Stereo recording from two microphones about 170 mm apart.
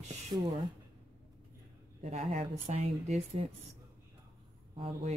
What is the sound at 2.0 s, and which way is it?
Speech, 40° right (ahead or behind).